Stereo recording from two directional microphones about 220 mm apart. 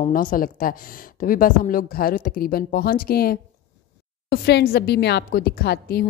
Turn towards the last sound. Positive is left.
turn(degrees=45)  # may be behind; listen again after turning